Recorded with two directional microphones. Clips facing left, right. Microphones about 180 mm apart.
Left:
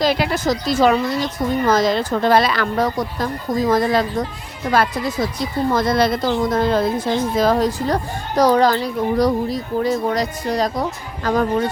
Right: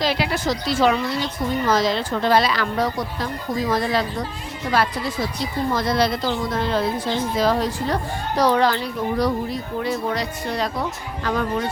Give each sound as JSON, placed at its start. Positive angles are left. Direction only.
{"t": 0.0, "sound": "a woman's voice", "side_deg": 45}